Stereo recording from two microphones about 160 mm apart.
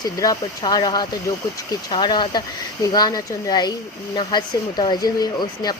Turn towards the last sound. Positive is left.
turn(degrees=25)  # may be behind; listen again after turning